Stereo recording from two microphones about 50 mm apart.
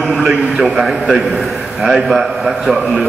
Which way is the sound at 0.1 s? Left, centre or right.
Centre.